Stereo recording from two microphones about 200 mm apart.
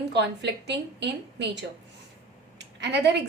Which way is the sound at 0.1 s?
60° right (ahead or behind).